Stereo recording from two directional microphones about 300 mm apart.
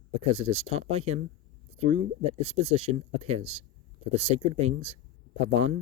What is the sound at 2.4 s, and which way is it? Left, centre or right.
A man's voice, centre.